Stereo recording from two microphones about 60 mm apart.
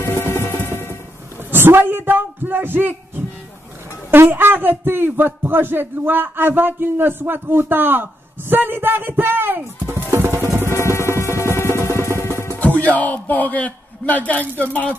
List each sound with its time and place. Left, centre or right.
0.0 s music: left
1.5 s a sound: right
4.1 s a man's voice: right
10.1 s music: right
10.7 s music: left
12.5 s a man's voice: left